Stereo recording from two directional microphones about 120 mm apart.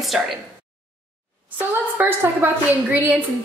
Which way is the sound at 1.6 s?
15° right (ahead or behind).